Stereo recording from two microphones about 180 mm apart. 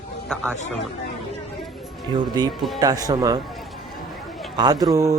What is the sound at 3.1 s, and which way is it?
Speech, 20° right (ahead or behind).